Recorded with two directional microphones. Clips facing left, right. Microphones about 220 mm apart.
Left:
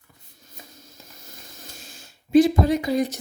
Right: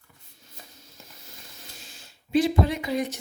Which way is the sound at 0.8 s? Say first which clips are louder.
Left 2 dB; 45° left (ahead or behind).